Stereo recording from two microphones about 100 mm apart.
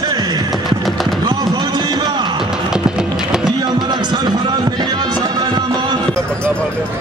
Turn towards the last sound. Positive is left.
turn(degrees=-45)  # may be behind; listen again after turning